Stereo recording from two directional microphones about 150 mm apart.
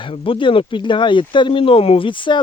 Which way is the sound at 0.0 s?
35° left (ahead or behind).